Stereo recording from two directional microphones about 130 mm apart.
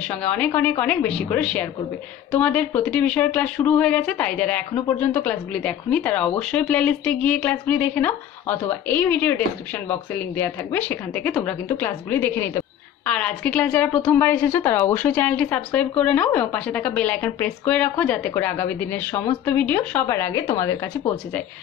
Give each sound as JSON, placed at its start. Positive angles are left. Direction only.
{"t": 0.1, "sound": "a woman's voice", "side_deg": 10}